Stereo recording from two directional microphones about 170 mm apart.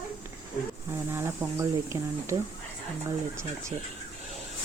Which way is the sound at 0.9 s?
15° right (ahead or behind).